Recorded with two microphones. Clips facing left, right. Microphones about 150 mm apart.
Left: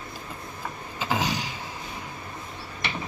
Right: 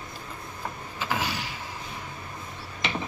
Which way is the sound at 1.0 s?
20° left (ahead or behind).